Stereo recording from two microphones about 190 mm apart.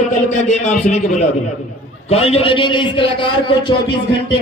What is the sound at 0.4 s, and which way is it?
A man's voice, 35° left (ahead or behind).